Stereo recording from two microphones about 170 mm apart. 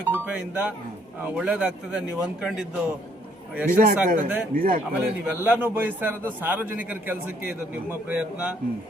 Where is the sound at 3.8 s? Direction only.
50° right (ahead or behind).